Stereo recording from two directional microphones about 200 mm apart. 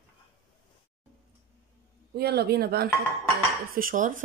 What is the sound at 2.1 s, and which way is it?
Speech, 55° right (ahead or behind).